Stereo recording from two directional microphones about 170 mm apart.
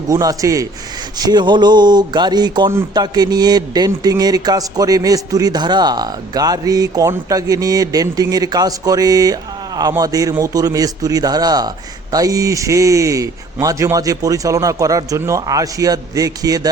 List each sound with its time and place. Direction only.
0.1 s a man's voice: 20° right (ahead or behind)